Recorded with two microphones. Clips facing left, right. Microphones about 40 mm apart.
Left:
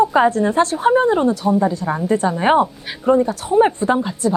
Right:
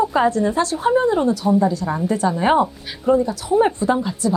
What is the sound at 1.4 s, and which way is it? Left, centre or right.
Speech, centre.